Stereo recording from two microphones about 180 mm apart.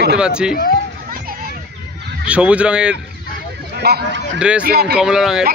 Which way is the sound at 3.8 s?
60° right (ahead or behind).